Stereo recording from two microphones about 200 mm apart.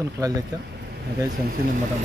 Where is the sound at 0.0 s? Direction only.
20° right (ahead or behind).